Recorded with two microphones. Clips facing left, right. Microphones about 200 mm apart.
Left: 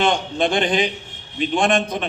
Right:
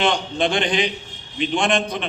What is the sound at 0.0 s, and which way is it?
A man's voice, 50° left (ahead or behind).